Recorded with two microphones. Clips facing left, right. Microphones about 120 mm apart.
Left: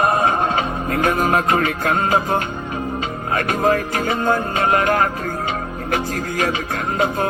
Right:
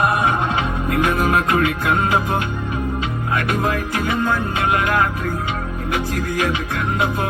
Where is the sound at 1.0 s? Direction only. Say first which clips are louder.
Left 3 dB; 40° left (ahead or behind).